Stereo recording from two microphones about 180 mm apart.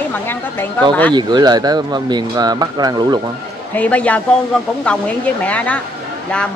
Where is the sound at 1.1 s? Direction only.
25° right (ahead or behind).